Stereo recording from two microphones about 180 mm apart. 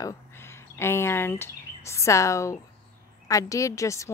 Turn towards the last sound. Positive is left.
turn(degrees=15)  # may be behind; listen again after turning